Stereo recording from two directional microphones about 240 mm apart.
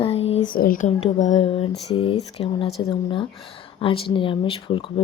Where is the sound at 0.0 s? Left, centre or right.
Left.